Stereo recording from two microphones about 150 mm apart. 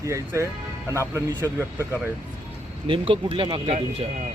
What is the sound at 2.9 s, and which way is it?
Speech, 35° right (ahead or behind).